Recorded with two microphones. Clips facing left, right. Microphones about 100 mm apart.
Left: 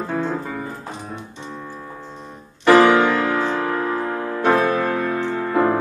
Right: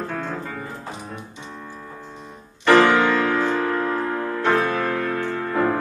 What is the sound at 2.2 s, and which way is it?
Music, 10° left (ahead or behind).